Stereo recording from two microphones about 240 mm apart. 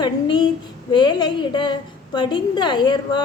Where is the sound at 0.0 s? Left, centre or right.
Centre.